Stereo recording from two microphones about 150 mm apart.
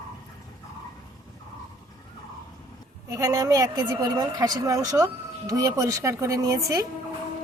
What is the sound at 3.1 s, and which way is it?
Speech, 20° right (ahead or behind).